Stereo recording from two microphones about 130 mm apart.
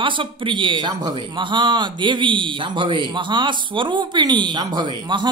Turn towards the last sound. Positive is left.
turn(degrees=-35)  # may be behind; listen again after turning